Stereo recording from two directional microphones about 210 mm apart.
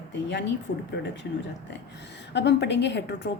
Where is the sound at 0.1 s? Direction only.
55° left (ahead or behind).